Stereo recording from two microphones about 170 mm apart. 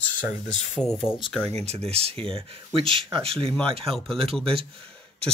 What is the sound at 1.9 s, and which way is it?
Speech, 35° right (ahead or behind).